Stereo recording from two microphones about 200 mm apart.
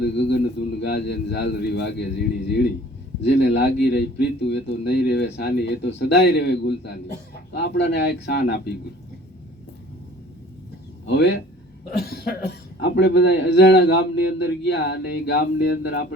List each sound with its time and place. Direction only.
0.0 s a man's voice: 55° left (ahead or behind)
11.0 s a man's voice: 60° left (ahead or behind)